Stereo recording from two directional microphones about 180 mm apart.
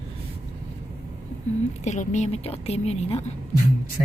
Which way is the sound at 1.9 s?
40° left (ahead or behind).